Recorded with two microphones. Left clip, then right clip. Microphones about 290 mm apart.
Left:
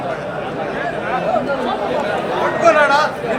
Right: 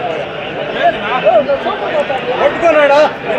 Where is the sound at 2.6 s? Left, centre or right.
Right.